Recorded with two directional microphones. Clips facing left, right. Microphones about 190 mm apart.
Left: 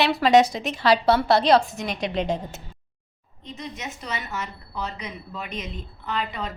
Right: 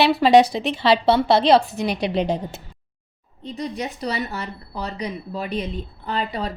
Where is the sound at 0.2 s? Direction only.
30° right (ahead or behind).